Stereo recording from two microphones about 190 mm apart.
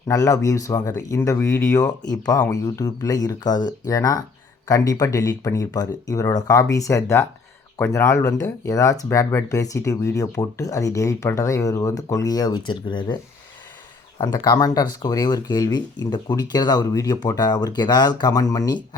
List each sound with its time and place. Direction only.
0.1 s speech: 15° left (ahead or behind)
14.2 s speech: 20° left (ahead or behind)